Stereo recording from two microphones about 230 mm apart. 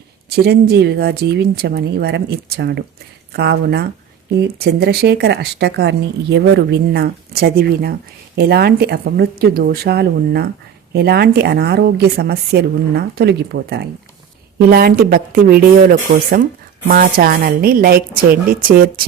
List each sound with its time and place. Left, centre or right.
0.3 s a woman's voice: right